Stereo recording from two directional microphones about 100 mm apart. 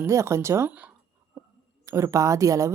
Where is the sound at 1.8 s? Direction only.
30° right (ahead or behind).